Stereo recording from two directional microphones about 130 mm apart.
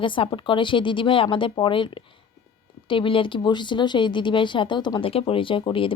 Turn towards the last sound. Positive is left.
turn(degrees=40)  # may be behind; listen again after turning